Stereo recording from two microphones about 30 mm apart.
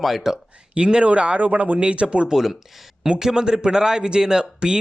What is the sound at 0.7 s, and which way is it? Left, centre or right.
Speech, right.